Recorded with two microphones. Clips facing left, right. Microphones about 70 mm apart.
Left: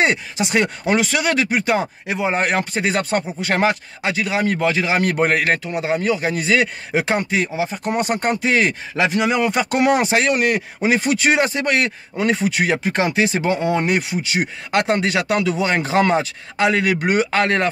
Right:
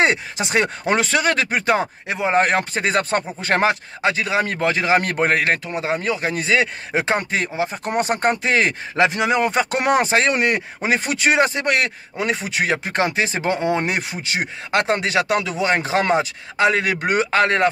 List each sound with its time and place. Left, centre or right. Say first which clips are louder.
0.0 s speech: even; right
5.2 s speech: left 1 dB; right
13.5 s speech: left 1 dB; right
13.8 s speech: left 4 dB; right